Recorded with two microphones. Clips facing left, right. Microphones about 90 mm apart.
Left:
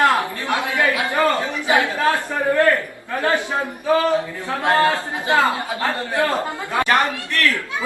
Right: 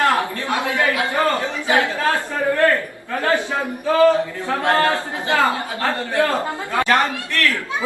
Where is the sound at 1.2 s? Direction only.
20° left (ahead or behind).